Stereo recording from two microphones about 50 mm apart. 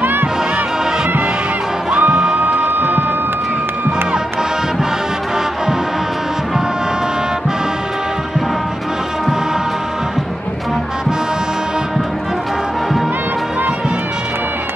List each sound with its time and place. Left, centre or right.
0.0 s music: right
1.9 s music: right
2.8 s a sound: right